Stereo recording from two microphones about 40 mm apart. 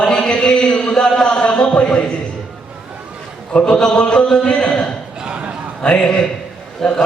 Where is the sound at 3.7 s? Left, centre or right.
Centre.